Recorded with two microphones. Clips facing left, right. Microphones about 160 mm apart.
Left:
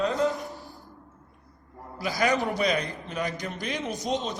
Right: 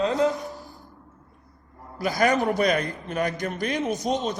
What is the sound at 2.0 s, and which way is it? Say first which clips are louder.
A man's voice: right 4 dB; 45° right (ahead or behind).